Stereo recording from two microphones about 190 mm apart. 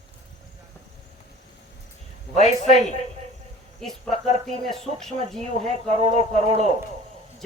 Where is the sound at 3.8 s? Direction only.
Centre (ahead or behind).